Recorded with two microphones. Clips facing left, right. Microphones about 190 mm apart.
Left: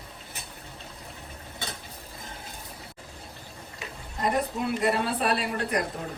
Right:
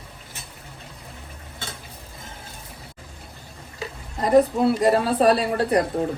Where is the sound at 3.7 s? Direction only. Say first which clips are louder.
Right 7 dB; 35° right (ahead or behind).